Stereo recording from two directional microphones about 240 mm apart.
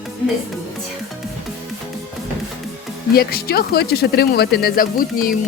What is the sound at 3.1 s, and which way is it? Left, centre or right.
Speech, left.